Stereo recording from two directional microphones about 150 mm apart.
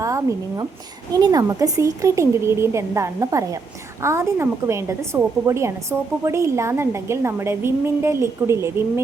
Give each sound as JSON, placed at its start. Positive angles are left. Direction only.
{"t": 0.0, "sound": "a woman's voice", "side_deg": -20}